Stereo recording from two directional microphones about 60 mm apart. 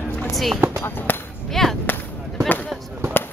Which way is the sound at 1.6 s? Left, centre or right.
Centre.